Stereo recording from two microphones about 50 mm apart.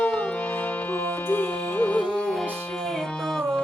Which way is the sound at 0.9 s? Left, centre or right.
Left.